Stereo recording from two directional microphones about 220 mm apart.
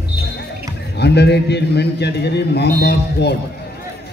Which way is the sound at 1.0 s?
50° left (ahead or behind).